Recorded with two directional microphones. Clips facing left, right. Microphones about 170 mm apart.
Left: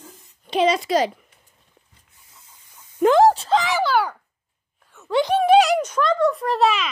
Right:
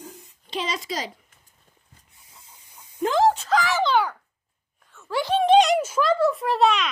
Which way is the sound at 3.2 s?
30° left (ahead or behind).